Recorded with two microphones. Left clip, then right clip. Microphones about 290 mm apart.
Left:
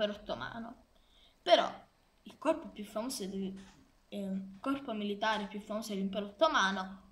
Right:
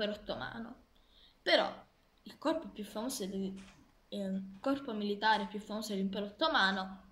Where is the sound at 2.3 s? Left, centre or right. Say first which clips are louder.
Left 2 dB; centre.